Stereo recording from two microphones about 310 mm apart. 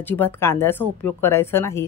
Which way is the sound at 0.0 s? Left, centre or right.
Centre.